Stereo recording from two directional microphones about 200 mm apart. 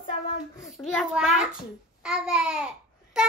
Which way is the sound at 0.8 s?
Centre (ahead or behind).